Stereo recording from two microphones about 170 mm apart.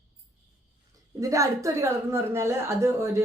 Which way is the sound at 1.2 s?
20° right (ahead or behind).